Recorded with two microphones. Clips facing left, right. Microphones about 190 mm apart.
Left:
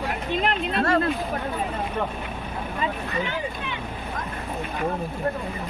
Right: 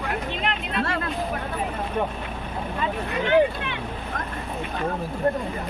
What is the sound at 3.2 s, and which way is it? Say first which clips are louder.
Boat: right 10 dB; 65° right (ahead or behind).